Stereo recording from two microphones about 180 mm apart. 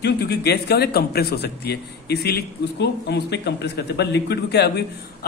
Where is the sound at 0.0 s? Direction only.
65° left (ahead or behind).